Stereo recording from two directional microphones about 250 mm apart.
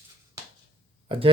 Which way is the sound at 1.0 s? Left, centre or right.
Right.